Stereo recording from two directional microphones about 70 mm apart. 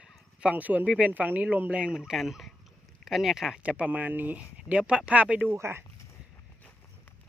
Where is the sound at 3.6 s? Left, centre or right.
Centre.